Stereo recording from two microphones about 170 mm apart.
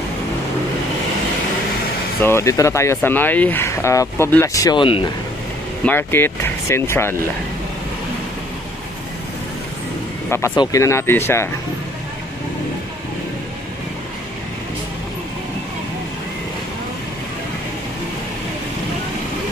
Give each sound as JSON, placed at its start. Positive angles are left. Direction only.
{"t": 2.2, "sound": "speech", "side_deg": 15}
{"t": 5.9, "sound": "speech", "side_deg": 15}
{"t": 10.3, "sound": "speech", "side_deg": 20}